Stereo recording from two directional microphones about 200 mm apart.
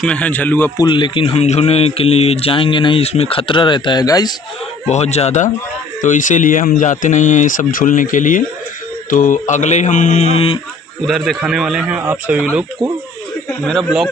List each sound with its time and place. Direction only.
0.0 s a man's voice: 5° left (ahead or behind)
0.8 s speech: 25° left (ahead or behind)
4.9 s speech: 35° left (ahead or behind)
11.0 s a man's voice: centre (ahead or behind)
12.8 s speech: 20° right (ahead or behind)
13.5 s a man's voice: centre (ahead or behind)